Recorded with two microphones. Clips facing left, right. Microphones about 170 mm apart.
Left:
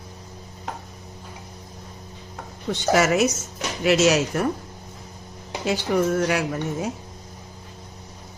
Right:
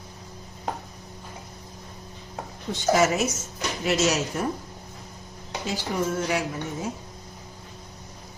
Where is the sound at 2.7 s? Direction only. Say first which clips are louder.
Left 2 dB; 75° left (ahead or behind).